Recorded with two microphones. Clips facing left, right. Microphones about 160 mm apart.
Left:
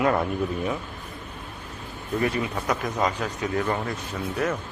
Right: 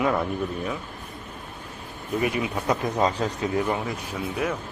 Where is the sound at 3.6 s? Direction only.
10° right (ahead or behind).